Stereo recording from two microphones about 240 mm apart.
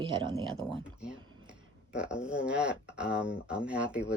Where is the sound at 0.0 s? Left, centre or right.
Centre.